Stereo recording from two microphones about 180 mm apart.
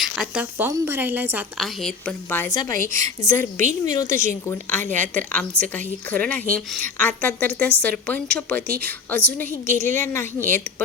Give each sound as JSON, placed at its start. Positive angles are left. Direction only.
{"t": 0.0, "sound": "a woman's voice", "side_deg": -5}
{"t": 1.5, "sound": "a woman's voice", "side_deg": 0}
{"t": 3.6, "sound": "speech", "side_deg": -40}
{"t": 4.1, "sound": "a woman's voice", "side_deg": 15}